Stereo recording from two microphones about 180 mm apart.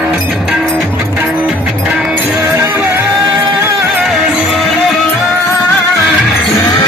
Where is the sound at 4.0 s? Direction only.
Centre (ahead or behind).